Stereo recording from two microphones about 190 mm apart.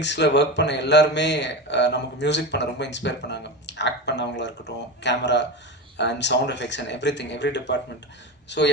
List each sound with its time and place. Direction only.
0.0 s speech: 65° left (ahead or behind)